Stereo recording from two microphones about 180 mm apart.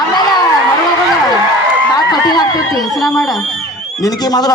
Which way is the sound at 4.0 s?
20° left (ahead or behind).